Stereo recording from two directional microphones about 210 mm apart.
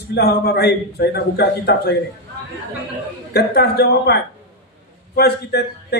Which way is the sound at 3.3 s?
50° left (ahead or behind).